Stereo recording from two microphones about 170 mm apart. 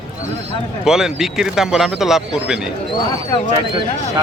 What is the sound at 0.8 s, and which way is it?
Speech, 5° right (ahead or behind).